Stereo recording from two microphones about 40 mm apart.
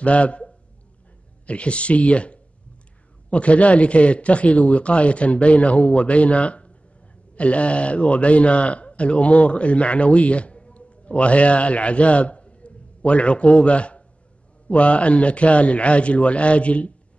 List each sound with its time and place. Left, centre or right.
0.0 s a man's voice: left